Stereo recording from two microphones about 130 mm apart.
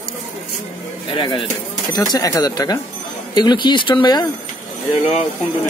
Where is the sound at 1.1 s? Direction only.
40° left (ahead or behind).